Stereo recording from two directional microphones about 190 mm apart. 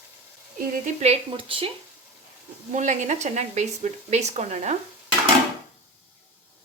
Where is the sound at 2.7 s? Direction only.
40° right (ahead or behind).